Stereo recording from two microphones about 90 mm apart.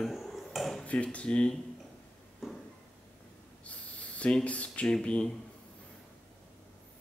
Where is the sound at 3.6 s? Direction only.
15° left (ahead or behind).